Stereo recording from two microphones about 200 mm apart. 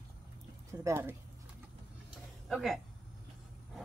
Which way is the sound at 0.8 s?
10° right (ahead or behind).